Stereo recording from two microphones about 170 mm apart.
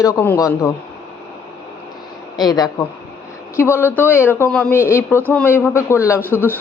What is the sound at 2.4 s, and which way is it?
Speech, 25° left (ahead or behind).